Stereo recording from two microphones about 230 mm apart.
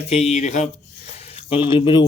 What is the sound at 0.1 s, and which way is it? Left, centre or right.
Speech, left.